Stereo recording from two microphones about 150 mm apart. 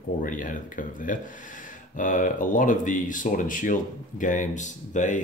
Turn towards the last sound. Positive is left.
turn(degrees=55)  # may be behind; listen again after turning